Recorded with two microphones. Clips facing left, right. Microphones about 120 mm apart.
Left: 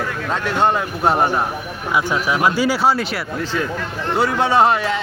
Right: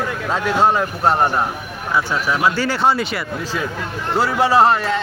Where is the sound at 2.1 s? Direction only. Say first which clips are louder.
Left 2 dB; 10° left (ahead or behind).